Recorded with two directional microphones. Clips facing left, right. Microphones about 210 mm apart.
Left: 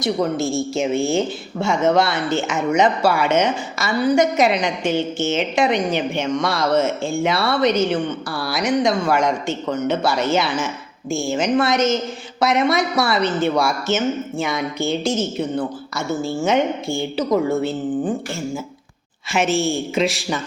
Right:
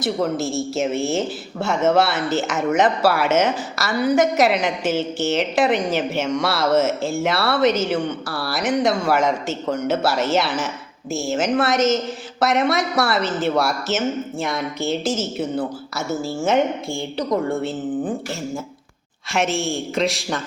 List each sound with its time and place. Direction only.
0.0 s a woman's voice: centre (ahead or behind)
19.3 s a woman's voice: centre (ahead or behind)